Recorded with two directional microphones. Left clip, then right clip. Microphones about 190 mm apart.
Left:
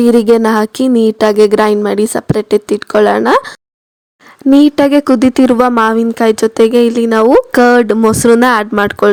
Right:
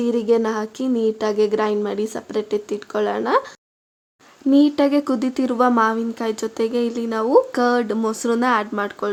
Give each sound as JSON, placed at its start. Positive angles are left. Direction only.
{"t": 0.0, "sound": "speech", "side_deg": 55}